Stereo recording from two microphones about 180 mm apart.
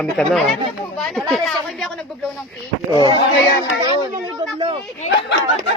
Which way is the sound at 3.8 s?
25° right (ahead or behind).